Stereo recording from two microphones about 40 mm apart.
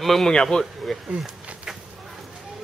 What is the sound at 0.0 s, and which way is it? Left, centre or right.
Speech, centre.